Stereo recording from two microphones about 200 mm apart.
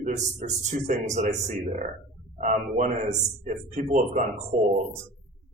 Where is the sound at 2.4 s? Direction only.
40° right (ahead or behind).